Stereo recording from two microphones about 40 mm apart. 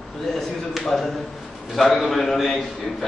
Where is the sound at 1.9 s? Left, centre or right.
Centre.